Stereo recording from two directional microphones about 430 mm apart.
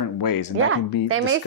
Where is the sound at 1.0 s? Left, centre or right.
Right.